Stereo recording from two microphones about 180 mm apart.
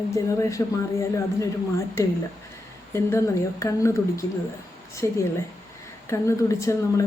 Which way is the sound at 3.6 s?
15° left (ahead or behind).